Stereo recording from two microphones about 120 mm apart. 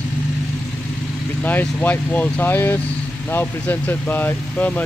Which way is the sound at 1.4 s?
15° left (ahead or behind).